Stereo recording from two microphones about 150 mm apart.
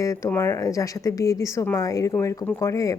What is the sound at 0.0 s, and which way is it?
A woman's voice, 20° left (ahead or behind).